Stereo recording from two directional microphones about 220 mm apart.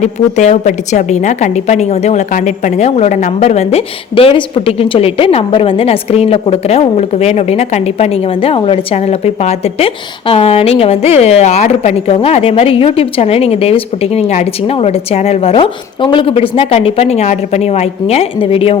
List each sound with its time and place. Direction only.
0.0 s a woman's voice: 30° left (ahead or behind)